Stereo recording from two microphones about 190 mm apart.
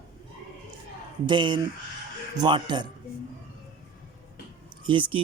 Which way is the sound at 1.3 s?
25° right (ahead or behind).